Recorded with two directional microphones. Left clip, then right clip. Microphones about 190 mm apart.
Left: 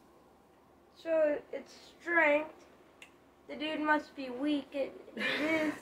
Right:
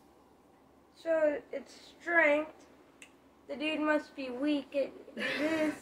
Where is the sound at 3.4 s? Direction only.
10° left (ahead or behind).